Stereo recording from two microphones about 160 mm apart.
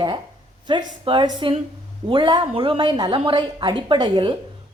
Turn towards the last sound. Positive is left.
turn(degrees=-30)  # may be behind; listen again after turning